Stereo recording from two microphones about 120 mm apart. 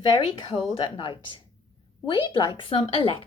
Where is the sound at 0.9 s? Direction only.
45° left (ahead or behind).